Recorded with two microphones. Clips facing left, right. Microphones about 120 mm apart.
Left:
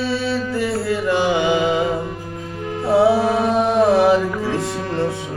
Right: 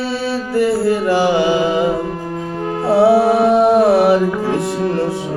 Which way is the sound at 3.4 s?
70° right (ahead or behind).